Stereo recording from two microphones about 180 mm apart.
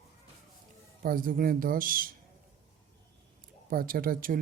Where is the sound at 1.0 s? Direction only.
50° right (ahead or behind).